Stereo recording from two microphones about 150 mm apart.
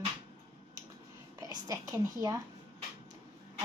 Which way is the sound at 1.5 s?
25° right (ahead or behind).